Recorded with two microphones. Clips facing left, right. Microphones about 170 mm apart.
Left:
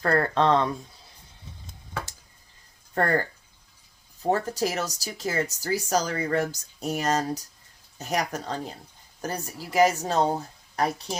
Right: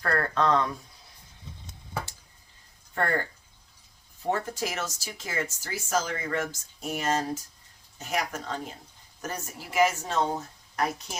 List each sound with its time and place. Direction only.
0.0 s speech: 25° left (ahead or behind)
2.9 s speech: 40° left (ahead or behind)
4.3 s speech: 40° left (ahead or behind)